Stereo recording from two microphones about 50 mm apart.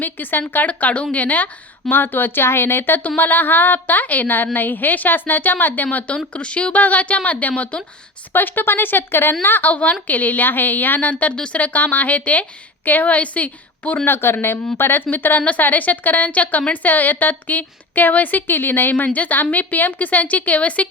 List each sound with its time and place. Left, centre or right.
0.0 s a woman's voice: left
1.9 s a woman's voice: left
8.3 s a woman's voice: left